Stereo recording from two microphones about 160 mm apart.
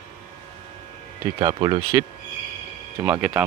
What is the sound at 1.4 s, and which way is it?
Speech, 25° right (ahead or behind).